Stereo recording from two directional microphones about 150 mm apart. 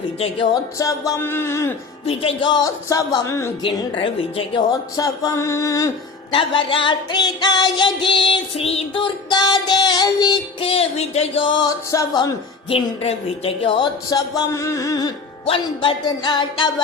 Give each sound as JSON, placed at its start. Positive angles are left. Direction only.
{"t": 0.5, "sound": "speech", "side_deg": 20}
{"t": 2.0, "sound": "speech", "side_deg": 35}
{"t": 3.6, "sound": "music", "side_deg": 35}
{"t": 4.7, "sound": "speech", "side_deg": 25}
{"t": 6.3, "sound": "music", "side_deg": 35}
{"t": 15.4, "sound": "music", "side_deg": 35}